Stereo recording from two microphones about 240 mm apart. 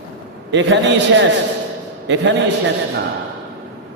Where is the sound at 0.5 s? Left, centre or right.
Right.